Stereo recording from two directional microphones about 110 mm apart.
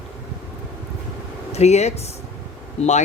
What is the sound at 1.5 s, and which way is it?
Speech, 80° left.